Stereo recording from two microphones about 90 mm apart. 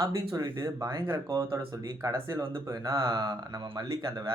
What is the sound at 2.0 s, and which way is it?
Speech, 35° right (ahead or behind).